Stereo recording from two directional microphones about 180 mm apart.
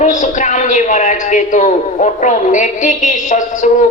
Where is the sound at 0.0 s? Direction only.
45° left (ahead or behind).